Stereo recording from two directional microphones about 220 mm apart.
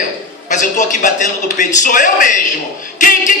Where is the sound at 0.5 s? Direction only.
35° left (ahead or behind).